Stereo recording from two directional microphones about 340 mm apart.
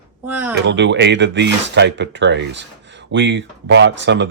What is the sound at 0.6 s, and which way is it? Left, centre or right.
Speech, right.